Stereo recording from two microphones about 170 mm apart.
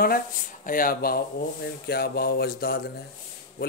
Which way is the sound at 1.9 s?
70° left (ahead or behind).